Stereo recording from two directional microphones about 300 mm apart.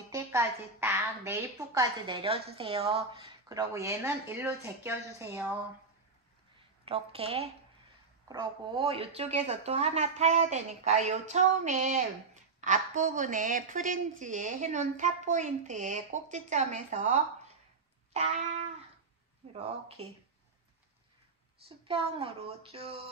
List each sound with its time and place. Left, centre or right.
0.1 s speech: centre
6.8 s a woman's voice: centre
21.6 s a woman's voice: centre